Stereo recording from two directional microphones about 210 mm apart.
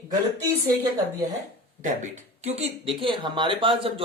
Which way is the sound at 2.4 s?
30° right (ahead or behind).